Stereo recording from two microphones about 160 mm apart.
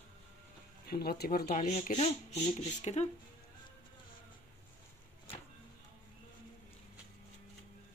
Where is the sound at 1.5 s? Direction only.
50° left (ahead or behind).